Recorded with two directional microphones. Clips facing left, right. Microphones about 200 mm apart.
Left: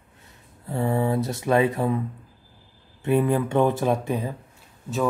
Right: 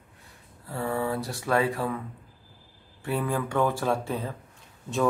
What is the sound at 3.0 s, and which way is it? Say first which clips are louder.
Speech: left 7 dB; 20° left (ahead or behind).